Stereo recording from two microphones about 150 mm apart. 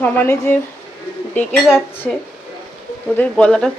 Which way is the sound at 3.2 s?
5° left (ahead or behind).